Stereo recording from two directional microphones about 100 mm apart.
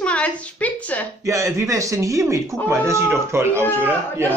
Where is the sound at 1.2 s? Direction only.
30° right (ahead or behind).